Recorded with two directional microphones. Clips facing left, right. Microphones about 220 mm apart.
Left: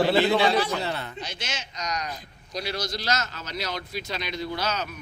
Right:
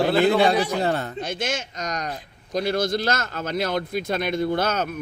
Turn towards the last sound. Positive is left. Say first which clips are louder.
# right 7 dB
turn(degrees=-50)  # may be behind; listen again after turning